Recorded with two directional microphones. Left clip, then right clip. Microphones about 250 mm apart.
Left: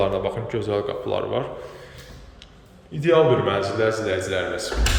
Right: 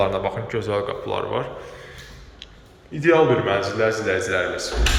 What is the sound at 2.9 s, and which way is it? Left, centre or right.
A man's voice, centre.